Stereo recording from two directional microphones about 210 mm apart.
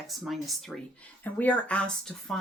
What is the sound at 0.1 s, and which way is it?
Speech, centre (ahead or behind).